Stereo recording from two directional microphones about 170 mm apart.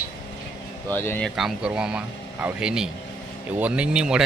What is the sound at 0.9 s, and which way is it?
Speech, 10° left (ahead or behind).